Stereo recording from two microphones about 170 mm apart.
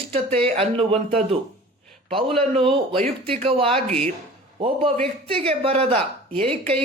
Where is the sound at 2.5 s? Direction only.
30° right (ahead or behind).